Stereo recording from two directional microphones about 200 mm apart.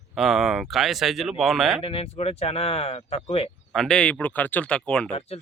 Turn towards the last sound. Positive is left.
turn(degrees=30)  # may be behind; listen again after turning